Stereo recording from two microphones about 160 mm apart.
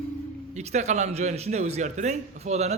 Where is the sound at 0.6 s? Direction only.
45° right (ahead or behind).